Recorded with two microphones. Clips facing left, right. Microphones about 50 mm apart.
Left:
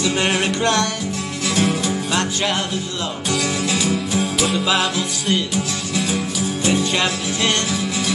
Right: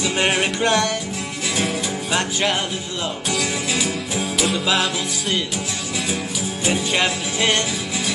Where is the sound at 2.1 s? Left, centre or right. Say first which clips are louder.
Right 2 dB; centre.